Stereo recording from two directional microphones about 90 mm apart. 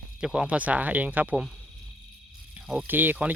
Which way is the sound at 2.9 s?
20° right (ahead or behind).